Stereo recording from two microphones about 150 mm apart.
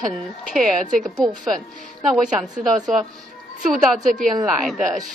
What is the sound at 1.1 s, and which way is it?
A woman's voice, centre (ahead or behind).